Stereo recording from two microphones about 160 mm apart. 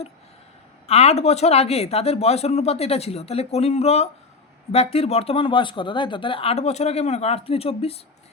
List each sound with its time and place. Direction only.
0.9 s speech: 40° left (ahead or behind)